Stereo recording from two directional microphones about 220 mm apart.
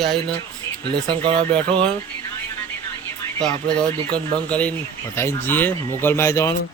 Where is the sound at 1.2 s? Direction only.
20° right (ahead or behind).